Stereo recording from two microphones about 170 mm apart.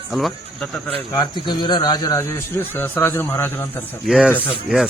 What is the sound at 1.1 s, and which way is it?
Speech, 25° left (ahead or behind).